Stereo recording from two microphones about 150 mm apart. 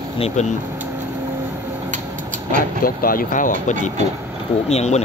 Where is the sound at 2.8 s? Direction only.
70° left (ahead or behind).